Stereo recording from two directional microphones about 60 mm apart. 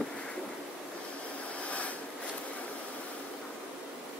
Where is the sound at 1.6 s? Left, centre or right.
Left.